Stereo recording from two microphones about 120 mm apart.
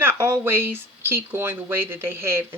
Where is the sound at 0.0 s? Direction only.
20° right (ahead or behind).